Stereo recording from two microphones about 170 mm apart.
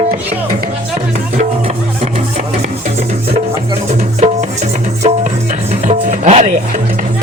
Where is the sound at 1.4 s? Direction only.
35° right (ahead or behind).